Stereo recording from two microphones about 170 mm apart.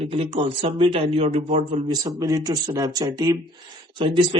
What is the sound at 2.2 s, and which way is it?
A man's voice, 20° right (ahead or behind).